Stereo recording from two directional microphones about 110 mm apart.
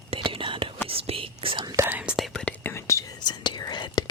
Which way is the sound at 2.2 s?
Centre (ahead or behind).